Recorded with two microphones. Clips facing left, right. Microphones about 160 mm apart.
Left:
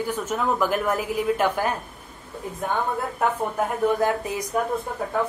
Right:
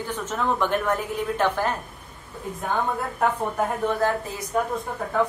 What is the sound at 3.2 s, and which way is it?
Speech, centre (ahead or behind).